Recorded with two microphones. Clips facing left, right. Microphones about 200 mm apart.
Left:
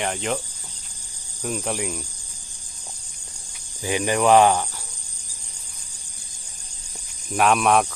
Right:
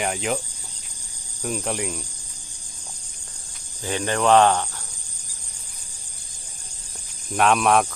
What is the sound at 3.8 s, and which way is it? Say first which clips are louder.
Speech: left 2 dB; 10° left (ahead or behind).